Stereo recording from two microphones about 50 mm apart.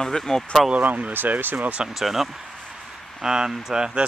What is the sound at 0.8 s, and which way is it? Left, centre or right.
Speech, right.